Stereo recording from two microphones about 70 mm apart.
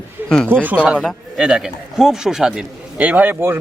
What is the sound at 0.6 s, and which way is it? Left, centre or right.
Speech, right.